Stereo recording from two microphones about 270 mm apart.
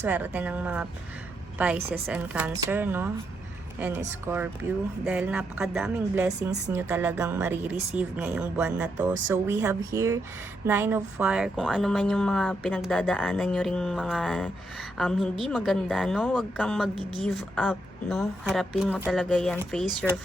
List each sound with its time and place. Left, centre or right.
0.0 s speech: centre